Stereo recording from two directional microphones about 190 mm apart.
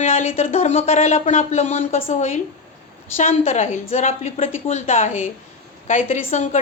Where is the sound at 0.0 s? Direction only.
35° left (ahead or behind).